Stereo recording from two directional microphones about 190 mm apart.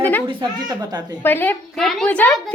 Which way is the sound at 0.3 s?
25° right (ahead or behind).